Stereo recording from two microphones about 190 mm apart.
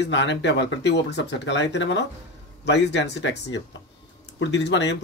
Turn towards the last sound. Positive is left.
turn(degrees=65)  # may be behind; listen again after turning